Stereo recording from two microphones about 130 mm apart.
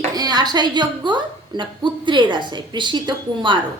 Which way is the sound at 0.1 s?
30° right (ahead or behind).